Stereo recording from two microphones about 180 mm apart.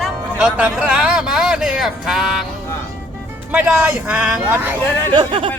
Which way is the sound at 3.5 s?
5° right (ahead or behind).